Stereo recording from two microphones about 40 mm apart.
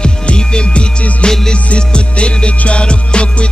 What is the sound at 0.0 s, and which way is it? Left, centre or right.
Music, left.